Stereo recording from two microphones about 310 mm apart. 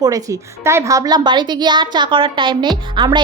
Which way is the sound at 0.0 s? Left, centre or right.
Centre.